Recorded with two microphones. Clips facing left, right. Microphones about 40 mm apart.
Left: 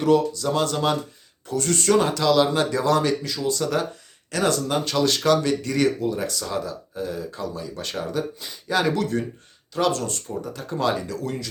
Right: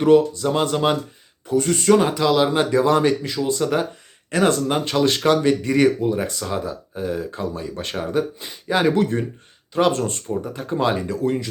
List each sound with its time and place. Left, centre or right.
0.0 s speech: right